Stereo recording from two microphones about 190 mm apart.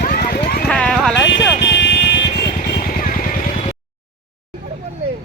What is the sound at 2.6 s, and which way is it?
Vehicle, 45° left (ahead or behind).